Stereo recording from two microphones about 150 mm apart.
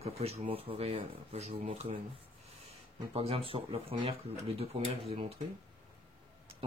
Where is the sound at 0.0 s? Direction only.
45° right (ahead or behind).